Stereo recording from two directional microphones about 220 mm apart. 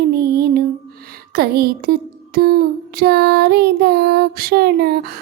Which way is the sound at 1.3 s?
45° right (ahead or behind).